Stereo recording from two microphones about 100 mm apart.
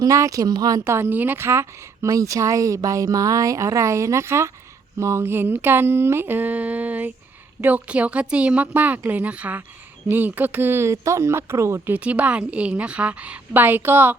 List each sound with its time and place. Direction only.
0.0 s speech: 35° right (ahead or behind)
0.9 s speech: 25° right (ahead or behind)
4.9 s mantra: 30° right (ahead or behind)
7.6 s a woman's voice: 15° right (ahead or behind)
10.1 s mantra: 20° right (ahead or behind)
11.9 s a woman's voice: 15° right (ahead or behind)